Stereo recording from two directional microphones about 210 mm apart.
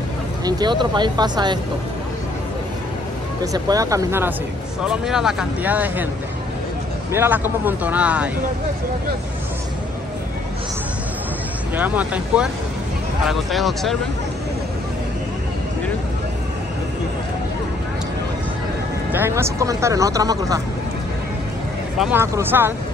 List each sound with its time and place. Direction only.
0.5 s speech: 20° right (ahead or behind)
3.5 s speech: 15° right (ahead or behind)
4.8 s speech: centre (ahead or behind)
7.1 s speech: 10° right (ahead or behind)
11.7 s speech: 10° right (ahead or behind)
19.1 s speech: 10° right (ahead or behind)
21.9 s speech: 5° right (ahead or behind)